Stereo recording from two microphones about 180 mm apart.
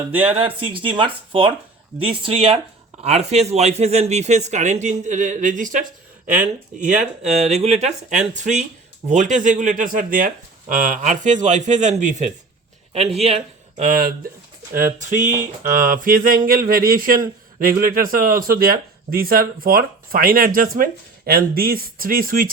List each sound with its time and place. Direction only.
0.4 s a man's voice: 30° right (ahead or behind)
13.8 s speech: 50° right (ahead or behind)